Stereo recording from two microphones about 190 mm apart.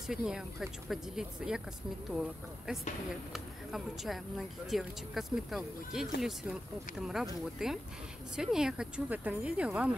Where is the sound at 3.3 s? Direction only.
Centre (ahead or behind).